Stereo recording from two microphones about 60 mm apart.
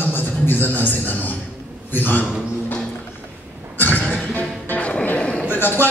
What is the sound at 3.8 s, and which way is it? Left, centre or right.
Music, left.